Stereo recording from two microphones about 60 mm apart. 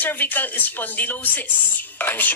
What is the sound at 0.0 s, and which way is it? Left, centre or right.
Speech, left.